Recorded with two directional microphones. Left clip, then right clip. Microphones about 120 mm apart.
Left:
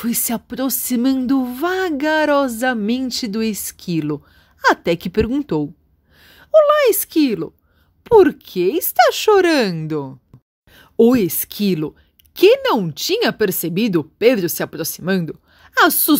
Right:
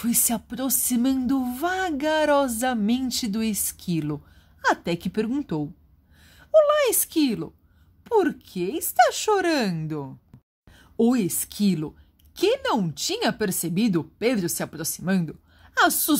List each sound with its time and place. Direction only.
0.0 s speech: 25° left (ahead or behind)
4.6 s speech: 40° left (ahead or behind); by 7.5 s 25° left (ahead or behind)
8.0 s a woman's voice: 45° left (ahead or behind)